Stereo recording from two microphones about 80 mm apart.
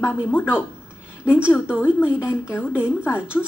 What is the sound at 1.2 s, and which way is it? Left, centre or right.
Speech, centre.